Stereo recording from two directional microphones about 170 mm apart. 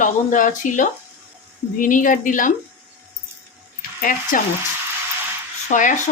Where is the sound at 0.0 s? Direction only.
50° left (ahead or behind).